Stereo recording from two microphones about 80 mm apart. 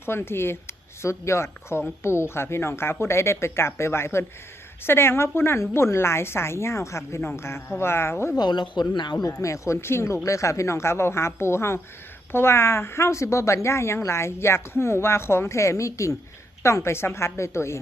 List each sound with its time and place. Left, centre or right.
0.0 s a woman's voice: left
8.4 s speech: left
8.9 s speech: left
9.2 s a woman's voice: left